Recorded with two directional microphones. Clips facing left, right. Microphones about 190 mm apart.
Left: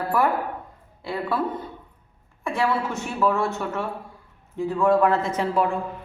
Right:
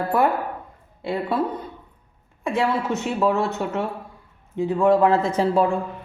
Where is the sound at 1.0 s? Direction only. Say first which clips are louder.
Right 2 dB; 20° right (ahead or behind).